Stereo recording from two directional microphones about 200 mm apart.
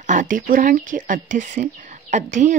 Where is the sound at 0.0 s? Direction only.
40° right (ahead or behind).